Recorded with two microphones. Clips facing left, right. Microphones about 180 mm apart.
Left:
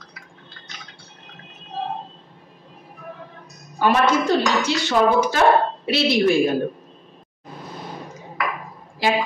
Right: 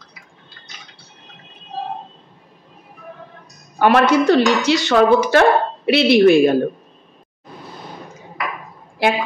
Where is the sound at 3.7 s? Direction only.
65° right (ahead or behind).